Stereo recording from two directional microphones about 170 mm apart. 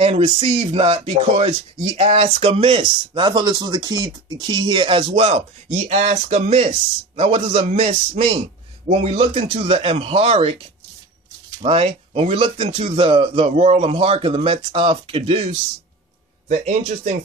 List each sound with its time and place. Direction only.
0.0 s speech: 35° right (ahead or behind)
11.6 s speech: 35° right (ahead or behind)
16.4 s a man's voice: 50° right (ahead or behind)